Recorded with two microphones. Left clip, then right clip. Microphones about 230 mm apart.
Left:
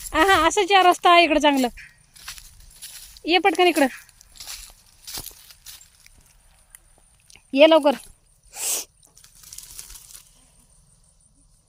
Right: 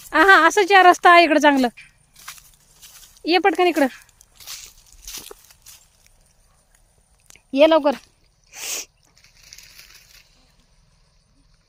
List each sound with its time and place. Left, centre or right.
0.1 s speech: centre
2.1 s crushing: centre
3.2 s speech: centre
4.4 s a sound: centre
7.3 s speech: centre
8.4 s sneeze: centre
9.6 s crumpling: left